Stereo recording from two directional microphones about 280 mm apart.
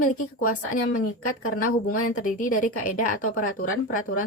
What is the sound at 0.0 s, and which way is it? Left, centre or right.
Speech, left.